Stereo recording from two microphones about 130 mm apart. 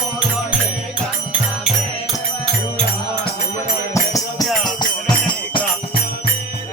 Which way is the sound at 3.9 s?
25° left (ahead or behind).